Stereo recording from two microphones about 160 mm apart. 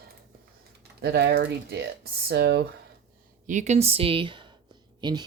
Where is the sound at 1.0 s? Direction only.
85° right.